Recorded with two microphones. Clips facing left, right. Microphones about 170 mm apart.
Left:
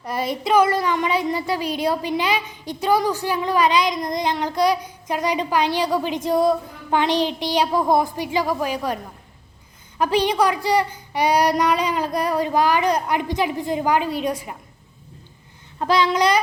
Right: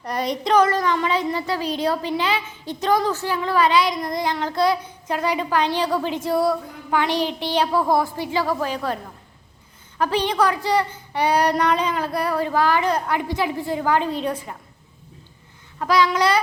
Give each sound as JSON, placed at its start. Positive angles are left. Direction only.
{"t": 0.0, "sound": "a child's voice", "side_deg": 5}
{"t": 10.0, "sound": "a child's voice", "side_deg": 15}
{"t": 15.8, "sound": "babbling", "side_deg": 25}